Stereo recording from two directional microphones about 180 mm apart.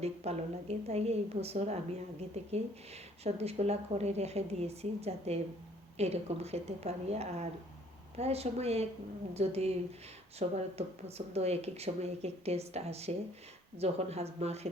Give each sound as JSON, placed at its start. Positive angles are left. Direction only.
{"t": 0.0, "sound": "speech", "side_deg": -35}